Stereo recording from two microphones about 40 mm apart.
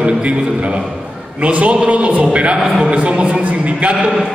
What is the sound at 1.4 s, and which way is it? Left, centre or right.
A man's voice, right.